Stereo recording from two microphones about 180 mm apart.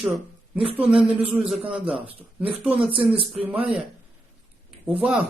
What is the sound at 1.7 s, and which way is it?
Speech, 5° right (ahead or behind).